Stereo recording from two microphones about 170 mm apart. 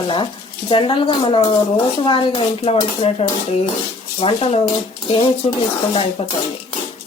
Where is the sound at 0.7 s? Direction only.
30° left (ahead or behind).